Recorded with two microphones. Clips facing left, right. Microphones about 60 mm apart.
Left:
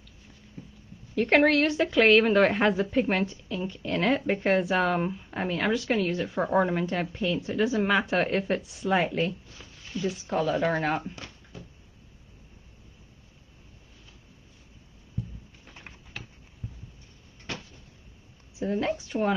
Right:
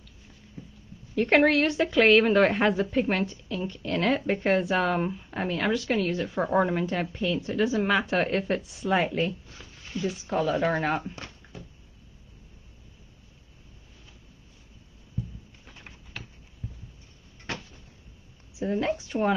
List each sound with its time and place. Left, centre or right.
1.1 s a woman's voice: centre
9.9 s speech: right
10.6 s a woman's voice: centre
11.2 s a sound: right
18.6 s speech: centre